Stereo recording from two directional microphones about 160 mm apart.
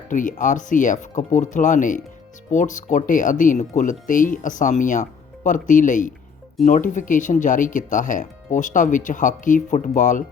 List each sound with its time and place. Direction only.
0.1 s speech: 55° left (ahead or behind)